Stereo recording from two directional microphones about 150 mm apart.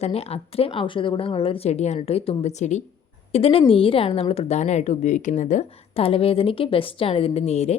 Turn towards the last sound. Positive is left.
turn(degrees=45)  # may be behind; listen again after turning